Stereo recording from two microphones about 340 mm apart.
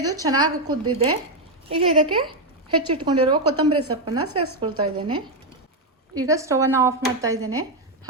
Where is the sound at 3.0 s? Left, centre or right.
Centre.